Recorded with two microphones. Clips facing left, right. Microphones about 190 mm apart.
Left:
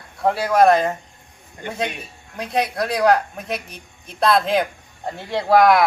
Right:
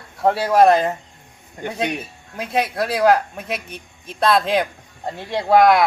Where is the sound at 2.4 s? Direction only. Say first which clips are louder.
Right 1 dB; 5° right (ahead or behind).